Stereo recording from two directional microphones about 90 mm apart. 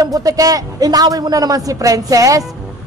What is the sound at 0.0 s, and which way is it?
A man's voice, 45° right (ahead or behind).